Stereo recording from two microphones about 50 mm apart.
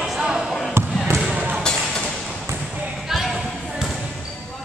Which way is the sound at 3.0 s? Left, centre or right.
Centre.